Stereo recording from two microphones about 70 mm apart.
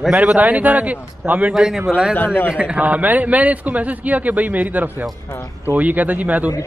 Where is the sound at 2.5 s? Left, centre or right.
Centre.